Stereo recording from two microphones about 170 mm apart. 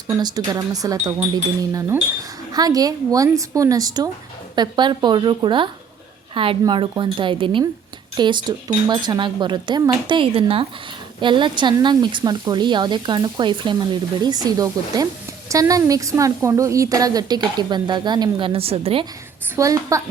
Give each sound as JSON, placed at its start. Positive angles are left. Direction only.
{"t": 0.1, "sound": "speech", "side_deg": -25}
{"t": 2.5, "sound": "speech", "side_deg": -20}
{"t": 19.5, "sound": "speech", "side_deg": -20}